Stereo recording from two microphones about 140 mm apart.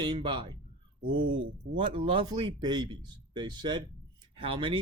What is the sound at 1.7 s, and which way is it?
A man's voice, 40° right (ahead or behind).